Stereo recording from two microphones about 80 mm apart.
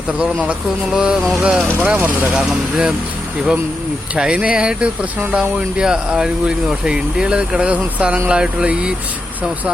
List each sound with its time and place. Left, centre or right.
0.2 s speech: centre
1.8 s speech: centre
4.1 s speech: centre